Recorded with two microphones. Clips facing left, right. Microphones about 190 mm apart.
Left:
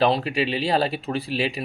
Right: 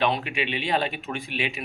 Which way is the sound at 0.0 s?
35° left (ahead or behind).